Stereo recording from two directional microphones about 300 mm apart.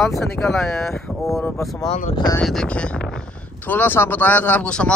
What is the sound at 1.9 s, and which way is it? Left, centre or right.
Speech, left.